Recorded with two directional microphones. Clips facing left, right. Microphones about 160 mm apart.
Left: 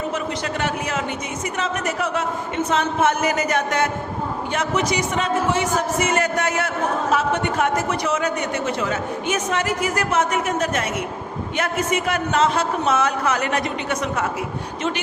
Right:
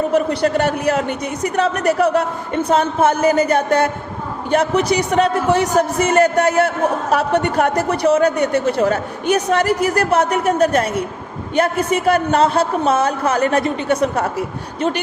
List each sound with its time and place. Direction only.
0.1 s a man's voice: 40° right (ahead or behind)